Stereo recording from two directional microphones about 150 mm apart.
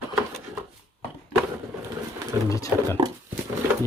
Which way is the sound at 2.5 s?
20° left (ahead or behind).